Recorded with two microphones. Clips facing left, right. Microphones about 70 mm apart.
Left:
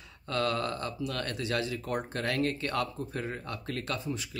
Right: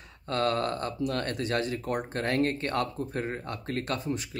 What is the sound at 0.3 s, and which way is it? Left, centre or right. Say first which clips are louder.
Speech: right 3 dB; right.